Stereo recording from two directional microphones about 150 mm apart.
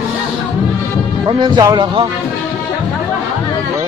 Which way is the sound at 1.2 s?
30° right (ahead or behind).